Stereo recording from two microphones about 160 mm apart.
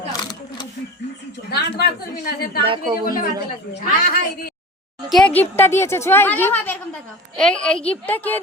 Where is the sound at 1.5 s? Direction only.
80° left.